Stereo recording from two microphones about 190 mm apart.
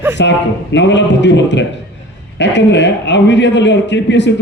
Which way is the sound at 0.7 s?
70° left (ahead or behind).